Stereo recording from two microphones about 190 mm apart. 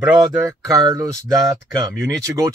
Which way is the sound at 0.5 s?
20° right (ahead or behind).